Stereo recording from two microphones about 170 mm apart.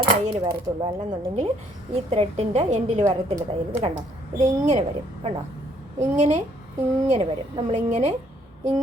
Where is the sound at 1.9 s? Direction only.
40° right (ahead or behind).